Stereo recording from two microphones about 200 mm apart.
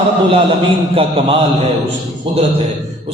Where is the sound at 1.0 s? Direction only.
30° right (ahead or behind).